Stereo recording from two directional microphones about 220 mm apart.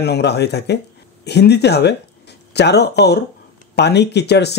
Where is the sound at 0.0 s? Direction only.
50° left (ahead or behind).